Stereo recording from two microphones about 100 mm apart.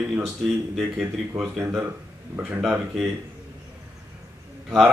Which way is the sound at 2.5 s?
10° right (ahead or behind).